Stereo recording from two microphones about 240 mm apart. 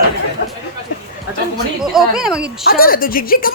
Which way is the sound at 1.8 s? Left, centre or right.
Centre.